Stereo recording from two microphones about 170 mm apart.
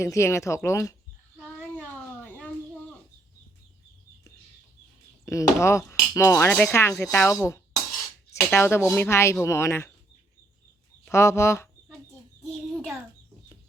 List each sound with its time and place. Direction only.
0.0 s speech: 15° left (ahead or behind)
1.8 s a sound: 10° left (ahead or behind)
5.2 s speech: 20° left (ahead or behind)
8.4 s speech: 15° left (ahead or behind)
11.1 s speech: 15° left (ahead or behind)
12.4 s a child's voice: centre (ahead or behind)